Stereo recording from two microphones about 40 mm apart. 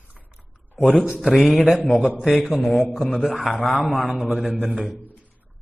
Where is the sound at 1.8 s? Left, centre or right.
Left.